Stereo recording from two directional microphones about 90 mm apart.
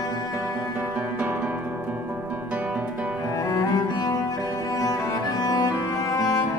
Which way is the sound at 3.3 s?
40° left (ahead or behind).